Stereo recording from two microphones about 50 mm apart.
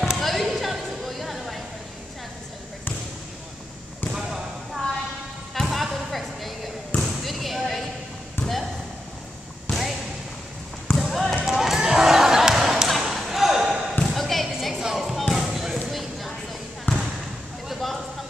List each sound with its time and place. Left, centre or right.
0.0 s a sound: centre
4.1 s basketball bounce: centre
5.5 s music: centre
7.0 s basketball bounce: centre
8.4 s basketball bounce: left
9.7 s basketball bounce: centre
11.0 s basketball bounce: centre
11.5 s basketball bounce: centre
14.1 s a sound: centre
16.9 s basketball bounce: left
17.6 s a sound: centre